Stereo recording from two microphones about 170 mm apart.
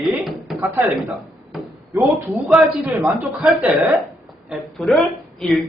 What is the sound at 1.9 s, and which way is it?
A man's voice, 20° right (ahead or behind).